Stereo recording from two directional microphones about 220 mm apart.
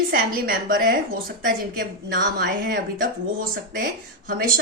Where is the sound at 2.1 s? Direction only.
50° right (ahead or behind).